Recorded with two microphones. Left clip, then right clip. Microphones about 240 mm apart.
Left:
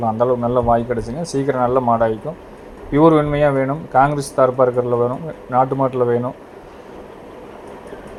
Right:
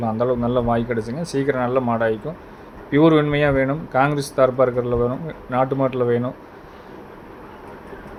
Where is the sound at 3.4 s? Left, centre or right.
Centre.